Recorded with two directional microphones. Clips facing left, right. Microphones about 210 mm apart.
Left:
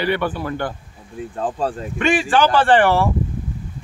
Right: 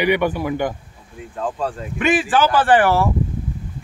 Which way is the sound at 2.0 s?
5° right (ahead or behind).